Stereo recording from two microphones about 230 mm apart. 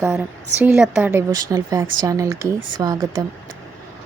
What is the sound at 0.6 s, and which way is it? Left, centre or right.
A woman's voice, centre.